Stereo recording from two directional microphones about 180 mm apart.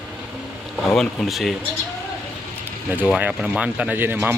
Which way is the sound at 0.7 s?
5° left (ahead or behind).